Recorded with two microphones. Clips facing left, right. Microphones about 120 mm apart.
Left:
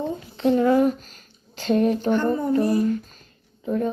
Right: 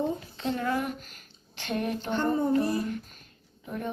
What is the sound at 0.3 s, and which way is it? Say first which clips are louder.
Speech: left 14 dB; 25° left (ahead or behind).